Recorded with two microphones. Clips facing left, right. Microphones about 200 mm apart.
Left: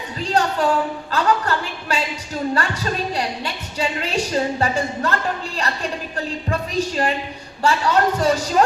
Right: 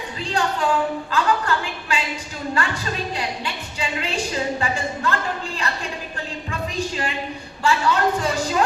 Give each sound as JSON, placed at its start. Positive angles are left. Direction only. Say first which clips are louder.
{"t": 0.2, "sound": "a woman's voice", "louder": "left 4 dB", "side_deg": 40}
{"t": 6.5, "sound": "a sound", "louder": "left 4 dB", "side_deg": 40}
{"t": 7.6, "sound": "a woman's voice", "louder": "left 2 dB", "side_deg": 40}